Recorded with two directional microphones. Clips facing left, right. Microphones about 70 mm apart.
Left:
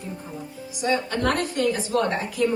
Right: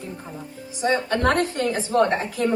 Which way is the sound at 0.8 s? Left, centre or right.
Right.